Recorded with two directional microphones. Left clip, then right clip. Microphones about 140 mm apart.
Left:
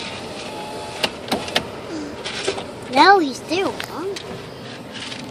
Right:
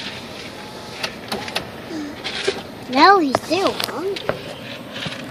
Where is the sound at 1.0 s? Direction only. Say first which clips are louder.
Left 3 dB; 70° left (ahead or behind).